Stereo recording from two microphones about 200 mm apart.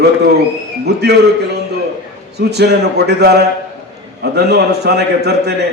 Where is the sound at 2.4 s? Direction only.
55° right (ahead or behind).